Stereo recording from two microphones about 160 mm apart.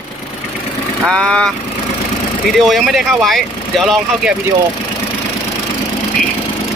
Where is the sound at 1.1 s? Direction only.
5° left (ahead or behind).